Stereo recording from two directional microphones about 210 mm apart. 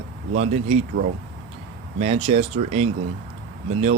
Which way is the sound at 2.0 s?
30° right (ahead or behind).